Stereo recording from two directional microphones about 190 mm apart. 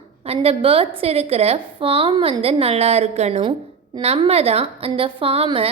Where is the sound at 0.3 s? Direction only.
30° right (ahead or behind).